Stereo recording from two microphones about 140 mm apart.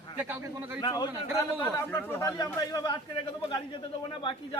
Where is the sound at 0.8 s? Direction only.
30° left (ahead or behind).